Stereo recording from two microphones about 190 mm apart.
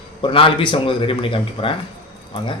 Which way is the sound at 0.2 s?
25° left (ahead or behind).